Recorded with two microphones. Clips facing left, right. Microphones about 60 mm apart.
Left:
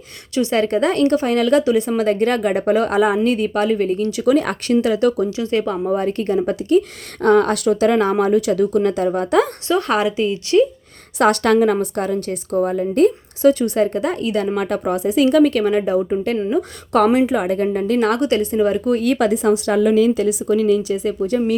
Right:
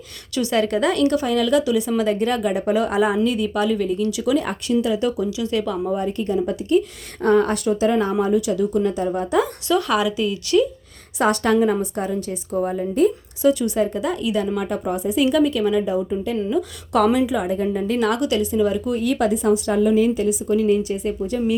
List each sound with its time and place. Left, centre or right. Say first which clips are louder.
0.3 s a woman's voice: left 3 dB; left
5.2 s a woman's voice: left 3 dB; left
5.9 s speech: left 5 dB; left
8.2 s speech: left 3 dB; left
9.6 s a woman's voice: left 2 dB; left
11.2 s a woman's voice: left 3 dB; left
16.4 s a woman's voice: left 2 dB; left